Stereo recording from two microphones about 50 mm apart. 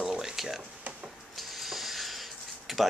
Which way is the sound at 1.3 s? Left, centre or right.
Centre.